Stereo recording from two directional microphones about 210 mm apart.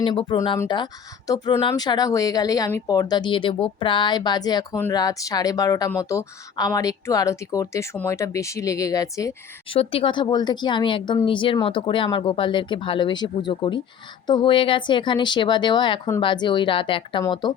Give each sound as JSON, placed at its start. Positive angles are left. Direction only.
{"t": 0.0, "sound": "speech", "side_deg": 25}